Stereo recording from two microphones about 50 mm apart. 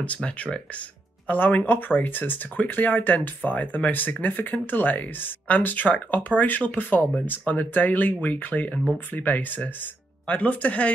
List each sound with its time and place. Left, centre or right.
0.0 s speech: left
1.2 s speech: left